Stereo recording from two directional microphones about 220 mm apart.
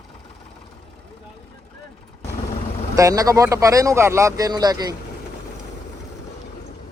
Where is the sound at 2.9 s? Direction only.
15° right (ahead or behind).